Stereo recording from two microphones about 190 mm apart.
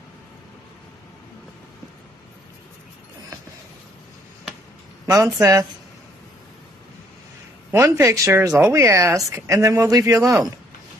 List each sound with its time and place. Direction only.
5.0 s speech: 15° right (ahead or behind)
7.7 s speech: 15° right (ahead or behind)